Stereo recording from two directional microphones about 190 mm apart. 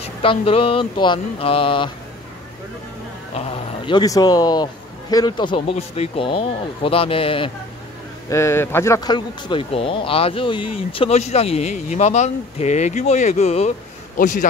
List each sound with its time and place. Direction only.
0.0 s speech: 30° left (ahead or behind)
3.3 s speech: 30° left (ahead or behind)
8.3 s a man's voice: 15° left (ahead or behind); by 14.5 s 40° left (ahead or behind)